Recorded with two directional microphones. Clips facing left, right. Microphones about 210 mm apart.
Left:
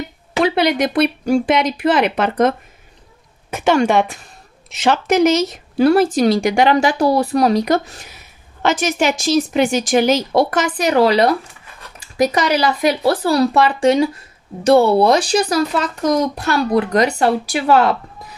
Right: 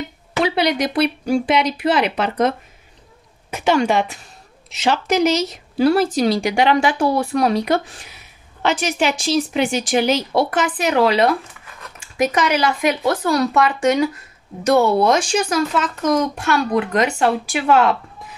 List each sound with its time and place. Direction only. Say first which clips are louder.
0.4 s speech: left 3 dB; 55° left (ahead or behind); by 17.9 s 40° left (ahead or behind)